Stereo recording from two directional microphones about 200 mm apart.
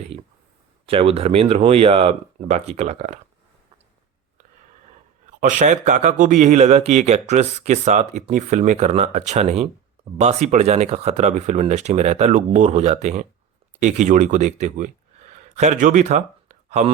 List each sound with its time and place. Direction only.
0.9 s speech: 30° right (ahead or behind)
5.4 s speech: 40° right (ahead or behind)